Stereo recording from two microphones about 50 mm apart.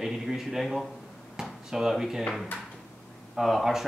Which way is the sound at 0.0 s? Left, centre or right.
Centre.